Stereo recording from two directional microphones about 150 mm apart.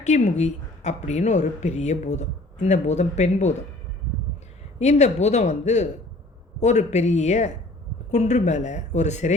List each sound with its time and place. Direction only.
0.0 s a woman's voice: 50° left (ahead or behind)
4.8 s a woman's voice: 50° left (ahead or behind)